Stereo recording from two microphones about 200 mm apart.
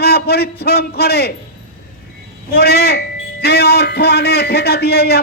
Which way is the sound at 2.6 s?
55° left (ahead or behind).